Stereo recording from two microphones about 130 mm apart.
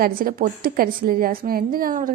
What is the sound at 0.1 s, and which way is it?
A woman's voice, 90° right.